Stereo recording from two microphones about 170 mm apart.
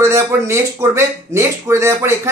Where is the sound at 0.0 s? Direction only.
15° right (ahead or behind).